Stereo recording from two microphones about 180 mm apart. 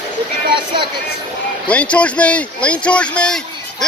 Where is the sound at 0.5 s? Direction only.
25° right (ahead or behind).